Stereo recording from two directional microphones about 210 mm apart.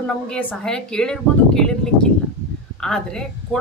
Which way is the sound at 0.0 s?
5° left (ahead or behind).